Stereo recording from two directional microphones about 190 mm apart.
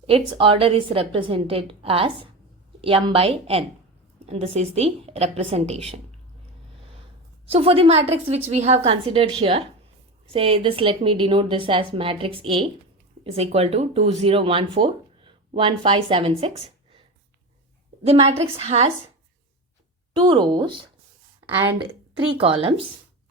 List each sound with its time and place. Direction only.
0.1 s a woman's voice: 30° right (ahead or behind)
7.5 s a woman's voice: 30° right (ahead or behind)
18.0 s a woman's voice: 35° right (ahead or behind)
20.1 s a woman's voice: 25° right (ahead or behind)
22.3 s a woman's voice: 30° right (ahead or behind)